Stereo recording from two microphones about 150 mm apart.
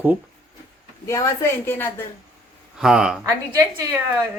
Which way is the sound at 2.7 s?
5° right (ahead or behind).